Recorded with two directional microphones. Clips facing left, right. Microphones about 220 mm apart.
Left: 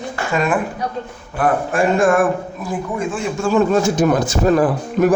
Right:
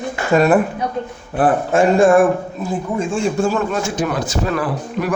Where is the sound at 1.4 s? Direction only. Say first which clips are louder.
Right 3 dB; 30° right (ahead or behind).